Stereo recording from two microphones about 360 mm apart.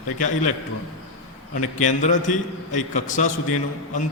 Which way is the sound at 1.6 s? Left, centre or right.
Centre.